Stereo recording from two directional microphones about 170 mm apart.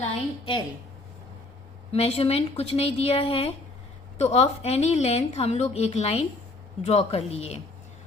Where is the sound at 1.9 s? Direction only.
35° left (ahead or behind).